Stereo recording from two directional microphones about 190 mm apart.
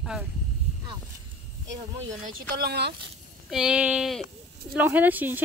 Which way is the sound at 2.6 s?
60° right (ahead or behind).